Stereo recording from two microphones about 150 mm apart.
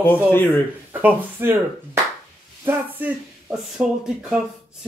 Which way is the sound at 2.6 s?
15° right (ahead or behind).